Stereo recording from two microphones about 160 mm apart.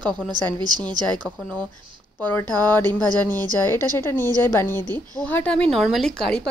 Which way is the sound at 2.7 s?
10° left (ahead or behind).